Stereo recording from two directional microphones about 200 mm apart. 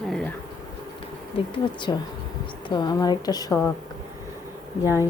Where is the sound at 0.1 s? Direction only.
5° left (ahead or behind).